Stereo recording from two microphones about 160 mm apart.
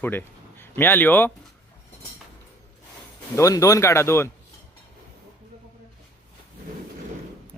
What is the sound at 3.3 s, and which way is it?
Speech, 20° left (ahead or behind).